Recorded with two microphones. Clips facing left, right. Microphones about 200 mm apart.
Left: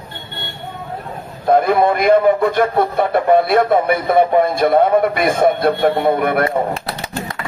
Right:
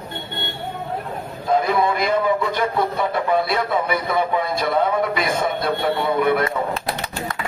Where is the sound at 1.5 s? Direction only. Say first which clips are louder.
Left 6 dB; 55° left (ahead or behind).